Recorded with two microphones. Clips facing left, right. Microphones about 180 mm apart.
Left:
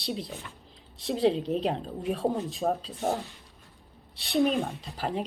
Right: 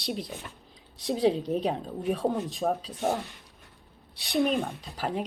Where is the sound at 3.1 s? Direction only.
65° right (ahead or behind).